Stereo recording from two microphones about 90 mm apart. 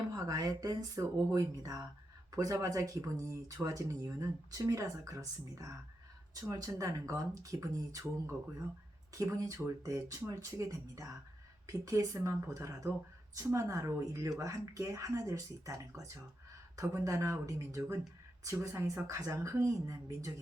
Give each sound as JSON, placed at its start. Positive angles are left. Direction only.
{"t": 0.1, "sound": "speech", "side_deg": -40}
{"t": 9.1, "sound": "speech", "side_deg": -40}